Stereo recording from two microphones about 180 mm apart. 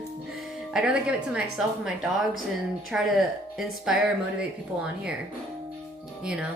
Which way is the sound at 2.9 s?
5° right (ahead or behind).